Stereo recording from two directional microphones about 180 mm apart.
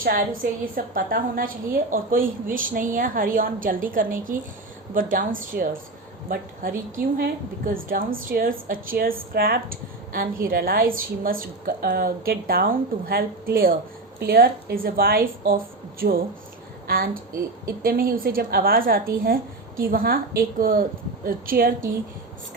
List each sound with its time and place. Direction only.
0.0 s a woman's voice: 50° right (ahead or behind)